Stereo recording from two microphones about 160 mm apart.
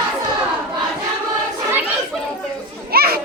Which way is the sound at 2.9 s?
70° right (ahead or behind).